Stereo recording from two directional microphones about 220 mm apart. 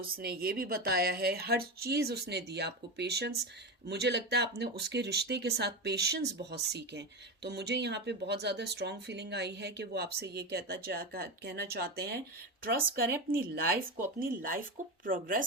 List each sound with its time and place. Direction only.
0.0 s speech: 45° right (ahead or behind)
13.5 s speech: 40° right (ahead or behind)